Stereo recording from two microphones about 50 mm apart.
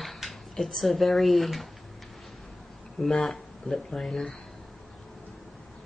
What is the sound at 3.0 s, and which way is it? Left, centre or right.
Speech, centre.